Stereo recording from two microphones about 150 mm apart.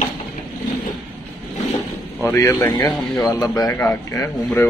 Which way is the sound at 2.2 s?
15° left (ahead or behind).